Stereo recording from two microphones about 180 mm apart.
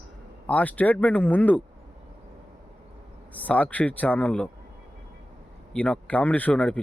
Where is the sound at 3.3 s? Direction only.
10° left (ahead or behind).